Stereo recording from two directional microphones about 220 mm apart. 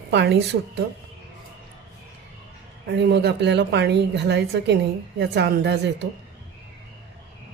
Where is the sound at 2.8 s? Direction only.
50° right (ahead or behind).